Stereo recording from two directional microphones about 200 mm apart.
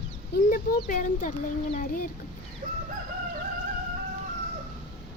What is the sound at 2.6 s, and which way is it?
Crowing, 40° right (ahead or behind).